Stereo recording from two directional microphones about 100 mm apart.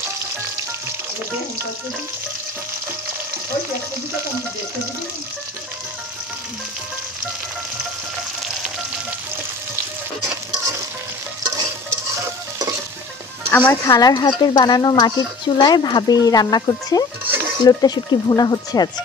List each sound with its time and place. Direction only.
11.4 s stir: 40° right (ahead or behind)
13.5 s speech: 15° left (ahead or behind)
13.8 s speech: 40° left (ahead or behind)